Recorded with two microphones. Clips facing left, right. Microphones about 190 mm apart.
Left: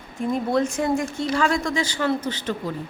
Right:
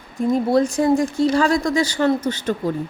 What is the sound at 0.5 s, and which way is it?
A woman's voice, 35° right (ahead or behind).